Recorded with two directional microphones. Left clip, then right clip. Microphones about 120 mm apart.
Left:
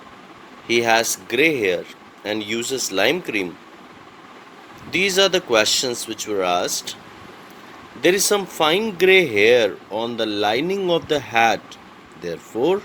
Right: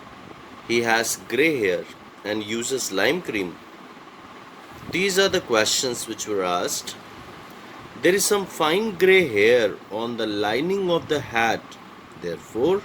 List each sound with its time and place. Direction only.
0.7 s speech: 30° left (ahead or behind)
4.9 s speech: 30° left (ahead or behind)
8.0 s speech: 30° left (ahead or behind)